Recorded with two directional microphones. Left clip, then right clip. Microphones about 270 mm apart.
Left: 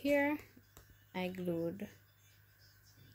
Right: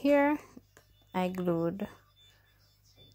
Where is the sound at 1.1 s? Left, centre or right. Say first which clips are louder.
Right 8 dB; centre.